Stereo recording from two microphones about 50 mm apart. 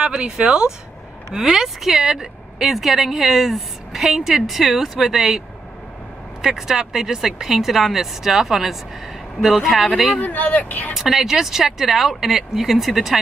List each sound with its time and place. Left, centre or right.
0.0 s a woman's voice: centre
6.4 s a woman's voice: centre
10.2 s speech: left
10.9 s speech: centre